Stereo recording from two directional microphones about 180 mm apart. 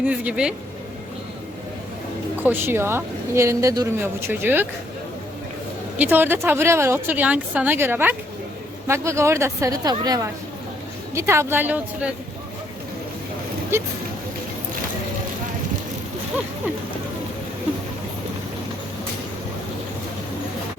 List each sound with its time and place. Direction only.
0.0 s speech: 5° right (ahead or behind)
2.4 s speech: 10° right (ahead or behind)
6.0 s speech: 10° right (ahead or behind)